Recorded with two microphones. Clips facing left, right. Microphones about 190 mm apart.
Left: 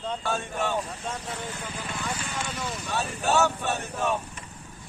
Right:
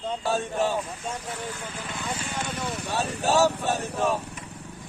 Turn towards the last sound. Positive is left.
turn(degrees=-35)  # may be behind; listen again after turning